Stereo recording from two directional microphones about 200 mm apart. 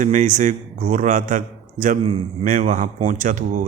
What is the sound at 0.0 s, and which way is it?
Speech, 40° right (ahead or behind).